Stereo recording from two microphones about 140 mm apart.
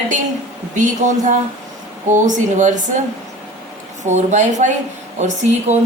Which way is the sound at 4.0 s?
55° right (ahead or behind).